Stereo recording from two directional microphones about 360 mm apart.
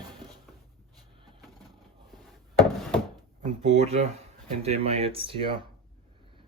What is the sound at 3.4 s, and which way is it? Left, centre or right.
Speech, centre.